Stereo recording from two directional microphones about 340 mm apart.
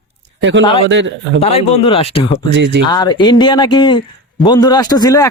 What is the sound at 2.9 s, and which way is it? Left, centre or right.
Speech, centre.